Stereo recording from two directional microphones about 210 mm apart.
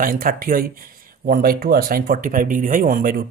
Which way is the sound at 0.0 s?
40° right (ahead or behind).